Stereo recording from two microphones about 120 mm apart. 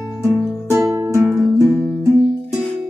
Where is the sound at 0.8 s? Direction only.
20° right (ahead or behind).